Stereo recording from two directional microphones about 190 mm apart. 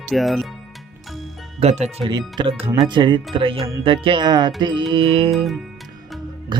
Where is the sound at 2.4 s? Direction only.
30° right (ahead or behind).